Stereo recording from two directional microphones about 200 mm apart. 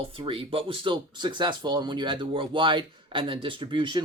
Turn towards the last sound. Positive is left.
turn(degrees=-25)  # may be behind; listen again after turning